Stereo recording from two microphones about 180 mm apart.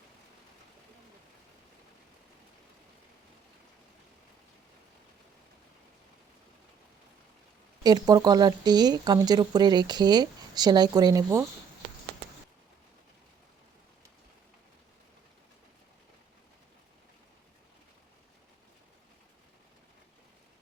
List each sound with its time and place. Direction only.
7.9 s speech: 20° right (ahead or behind)